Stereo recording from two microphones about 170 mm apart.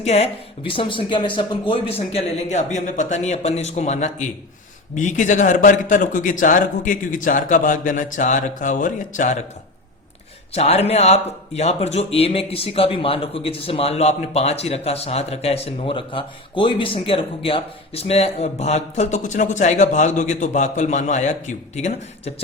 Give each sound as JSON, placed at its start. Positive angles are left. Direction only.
{"t": 0.0, "sound": "a man's voice", "side_deg": 40}
{"t": 10.5, "sound": "speech", "side_deg": 35}